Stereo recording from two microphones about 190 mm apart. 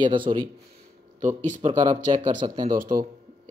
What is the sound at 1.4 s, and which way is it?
Speech, 40° right (ahead or behind).